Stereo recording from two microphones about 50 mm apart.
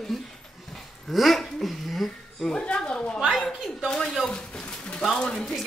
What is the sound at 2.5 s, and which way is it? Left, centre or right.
Speech, centre.